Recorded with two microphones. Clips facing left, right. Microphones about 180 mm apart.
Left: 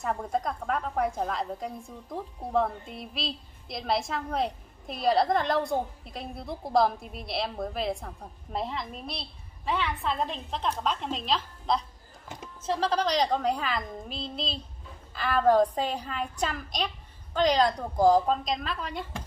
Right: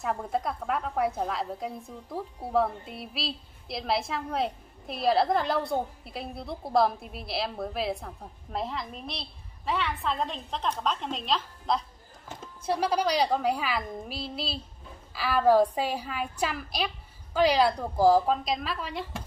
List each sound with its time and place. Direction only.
0.0 s a woman's voice: centre (ahead or behind)
12.6 s a woman's voice: 10° right (ahead or behind)